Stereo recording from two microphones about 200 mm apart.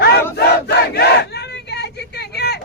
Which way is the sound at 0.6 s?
55° left (ahead or behind).